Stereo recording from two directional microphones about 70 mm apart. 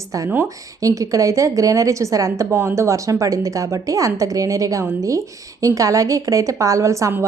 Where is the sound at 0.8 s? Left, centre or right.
Right.